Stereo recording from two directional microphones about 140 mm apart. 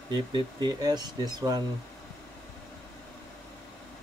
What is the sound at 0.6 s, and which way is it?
Speech, 30° right (ahead or behind).